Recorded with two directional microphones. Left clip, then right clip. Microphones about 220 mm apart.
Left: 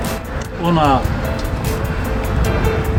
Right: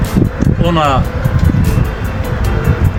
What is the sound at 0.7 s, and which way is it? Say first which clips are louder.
Speech: right 1 dB; 40° right (ahead or behind).